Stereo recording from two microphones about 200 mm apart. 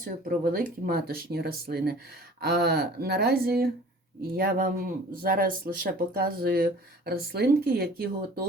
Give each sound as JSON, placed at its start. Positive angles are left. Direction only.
{"t": 0.0, "sound": "speech", "side_deg": -45}